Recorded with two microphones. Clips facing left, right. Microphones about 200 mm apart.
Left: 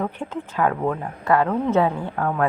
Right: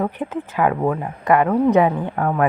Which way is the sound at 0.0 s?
10° right (ahead or behind).